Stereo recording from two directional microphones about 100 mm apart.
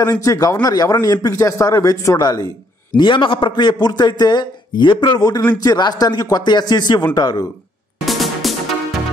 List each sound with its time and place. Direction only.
0.0 s a man's voice: 35° left (ahead or behind)
3.0 s a man's voice: 55° left (ahead or behind)
8.0 s music: centre (ahead or behind)